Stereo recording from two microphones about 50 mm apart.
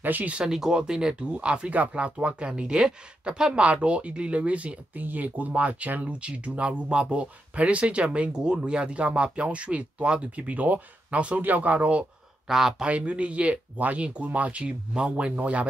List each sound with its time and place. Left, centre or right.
0.0 s speech: right
0.3 s speech: right
12.4 s speech: centre
12.8 s speech: right